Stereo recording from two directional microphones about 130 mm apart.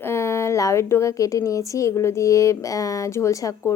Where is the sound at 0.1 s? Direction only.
20° left (ahead or behind).